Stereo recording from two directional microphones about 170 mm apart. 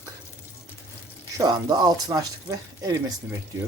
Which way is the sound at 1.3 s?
25° right (ahead or behind).